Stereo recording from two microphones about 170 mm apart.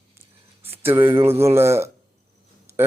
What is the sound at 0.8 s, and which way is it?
Speech, 15° right (ahead or behind).